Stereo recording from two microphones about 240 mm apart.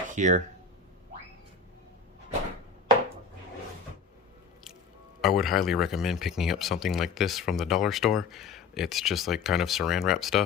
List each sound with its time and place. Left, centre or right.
0.2 s speech: right
5.2 s speech: centre